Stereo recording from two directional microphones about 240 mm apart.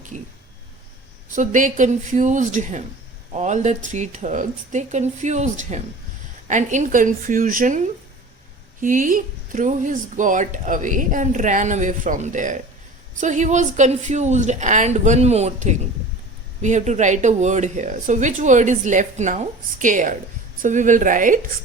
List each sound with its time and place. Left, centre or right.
1.4 s a woman's voice: right